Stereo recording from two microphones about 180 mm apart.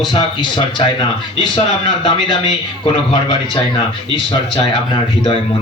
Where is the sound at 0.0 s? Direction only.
25° left (ahead or behind).